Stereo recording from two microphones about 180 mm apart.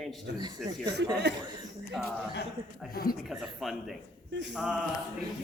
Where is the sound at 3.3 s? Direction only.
Centre (ahead or behind).